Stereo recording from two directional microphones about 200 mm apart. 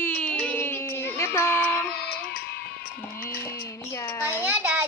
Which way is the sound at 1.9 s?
55° left (ahead or behind).